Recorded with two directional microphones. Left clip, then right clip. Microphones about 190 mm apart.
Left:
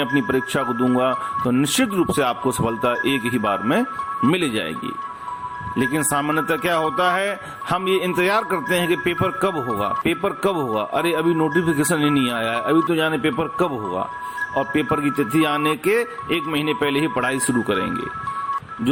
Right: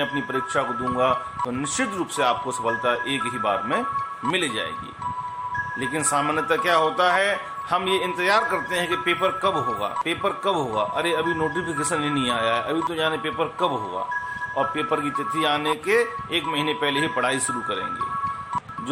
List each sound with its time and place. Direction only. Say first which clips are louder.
0.0 s speech: left 4 dB; 40° left (ahead or behind)
5.8 s speech: left 3 dB; 35° left (ahead or behind)